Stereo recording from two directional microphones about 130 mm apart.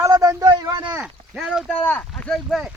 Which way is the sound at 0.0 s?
25° right (ahead or behind).